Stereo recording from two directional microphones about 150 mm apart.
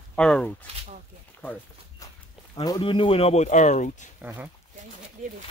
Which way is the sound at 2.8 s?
35° left (ahead or behind).